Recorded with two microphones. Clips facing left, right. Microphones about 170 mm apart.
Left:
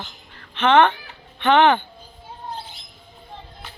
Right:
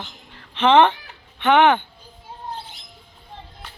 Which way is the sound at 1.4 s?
10° right (ahead or behind).